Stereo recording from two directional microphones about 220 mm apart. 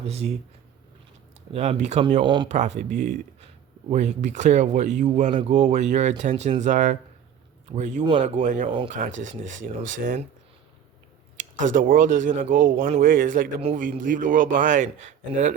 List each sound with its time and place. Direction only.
0.0 s speech: 30° right (ahead or behind)
1.5 s speech: 30° right (ahead or behind)
2.6 s a man's voice: 35° right (ahead or behind)
8.7 s speech: 20° right (ahead or behind)
9.0 s a man's voice: 35° right (ahead or behind)
11.6 s a man's voice: 40° right (ahead or behind)